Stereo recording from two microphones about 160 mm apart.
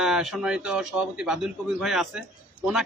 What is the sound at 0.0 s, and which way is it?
A man's voice, centre (ahead or behind).